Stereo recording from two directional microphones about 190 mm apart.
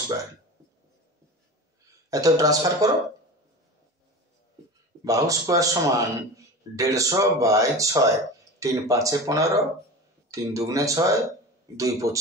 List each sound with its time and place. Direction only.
2.0 s speech: 20° right (ahead or behind)
5.0 s speech: 15° right (ahead or behind)